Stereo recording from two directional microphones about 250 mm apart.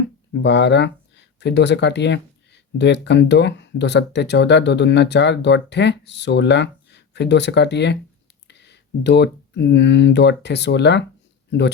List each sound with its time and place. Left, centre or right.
0.4 s speech: left